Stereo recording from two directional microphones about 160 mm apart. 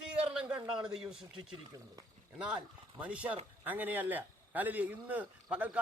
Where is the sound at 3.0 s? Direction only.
10° right (ahead or behind).